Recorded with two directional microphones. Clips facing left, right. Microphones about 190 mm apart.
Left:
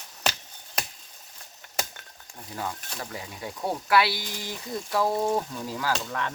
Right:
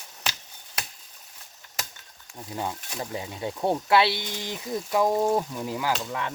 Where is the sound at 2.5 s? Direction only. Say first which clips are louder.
Right 2 dB; 20° right (ahead or behind).